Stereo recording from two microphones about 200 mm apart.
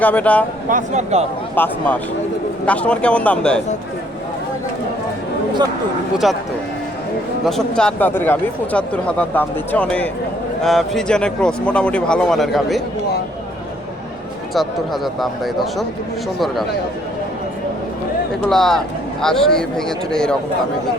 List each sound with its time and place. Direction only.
0.0 s speech: 10° left (ahead or behind)
0.7 s speech: 35° right (ahead or behind)
1.5 s speech: 10° left (ahead or behind)
6.2 s speech: centre (ahead or behind)
7.4 s speech: centre (ahead or behind)
14.5 s speech: centre (ahead or behind)
18.4 s speech: centre (ahead or behind)